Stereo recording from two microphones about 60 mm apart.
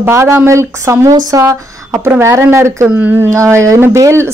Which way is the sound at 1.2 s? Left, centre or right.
Right.